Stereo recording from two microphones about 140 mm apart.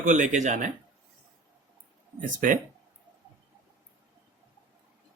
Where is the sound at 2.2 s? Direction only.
70° right (ahead or behind).